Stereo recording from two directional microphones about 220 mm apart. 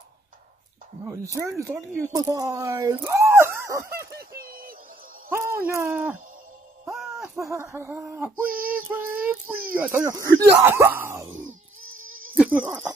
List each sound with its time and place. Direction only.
1.0 s speech: 15° right (ahead or behind)
4.2 s a sound: 40° right (ahead or behind)
5.3 s speech: 10° right (ahead or behind)
6.9 s a sound: centre (ahead or behind)
7.4 s speech: 15° right (ahead or behind)
8.5 s female singing: 40° right (ahead or behind)
9.8 s speech: 10° right (ahead or behind)
11.4 s a sound: 65° right (ahead or behind)
12.4 s speech: 10° right (ahead or behind)